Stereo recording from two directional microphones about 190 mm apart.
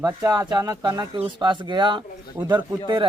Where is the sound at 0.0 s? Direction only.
15° right (ahead or behind).